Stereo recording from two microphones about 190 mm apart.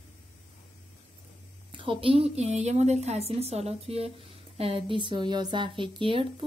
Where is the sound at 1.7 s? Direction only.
25° right (ahead or behind).